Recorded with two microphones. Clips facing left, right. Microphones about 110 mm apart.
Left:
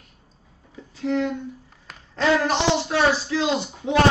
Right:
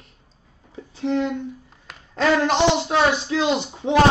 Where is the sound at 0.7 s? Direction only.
25° right (ahead or behind).